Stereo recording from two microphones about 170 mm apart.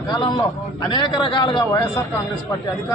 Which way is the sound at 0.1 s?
25° left (ahead or behind).